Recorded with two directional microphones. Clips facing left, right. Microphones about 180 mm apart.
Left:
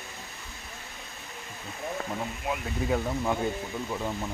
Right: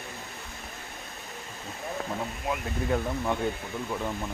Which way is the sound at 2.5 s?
5° left (ahead or behind).